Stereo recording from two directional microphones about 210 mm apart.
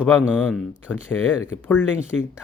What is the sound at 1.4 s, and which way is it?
Speech, 10° left (ahead or behind).